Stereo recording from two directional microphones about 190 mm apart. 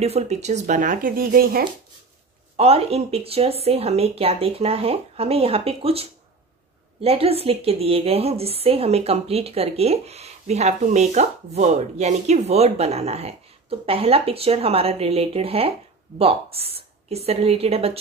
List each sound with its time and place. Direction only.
0.0 s speech: 35° right (ahead or behind); by 1.7 s 50° right (ahead or behind)
2.5 s a woman's voice: 30° right (ahead or behind)